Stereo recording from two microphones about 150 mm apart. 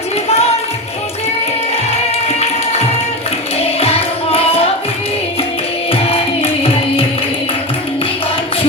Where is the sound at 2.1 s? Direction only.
45° left (ahead or behind).